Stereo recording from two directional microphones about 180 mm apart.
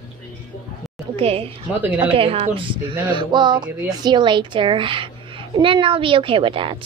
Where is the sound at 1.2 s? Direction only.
30° right (ahead or behind).